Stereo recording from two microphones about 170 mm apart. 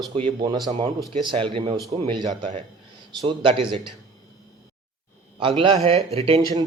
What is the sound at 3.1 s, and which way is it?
Speech, 30° right (ahead or behind).